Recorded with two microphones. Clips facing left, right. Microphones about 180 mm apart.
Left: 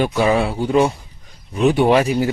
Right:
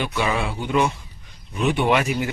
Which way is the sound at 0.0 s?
40° left (ahead or behind).